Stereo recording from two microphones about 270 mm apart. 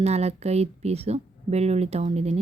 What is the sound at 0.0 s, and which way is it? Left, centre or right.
Speech, right.